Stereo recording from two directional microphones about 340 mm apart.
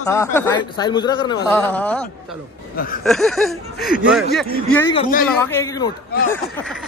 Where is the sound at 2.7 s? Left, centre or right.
Left.